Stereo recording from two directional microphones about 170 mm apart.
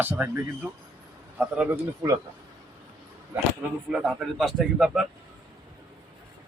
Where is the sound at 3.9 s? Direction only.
Centre (ahead or behind).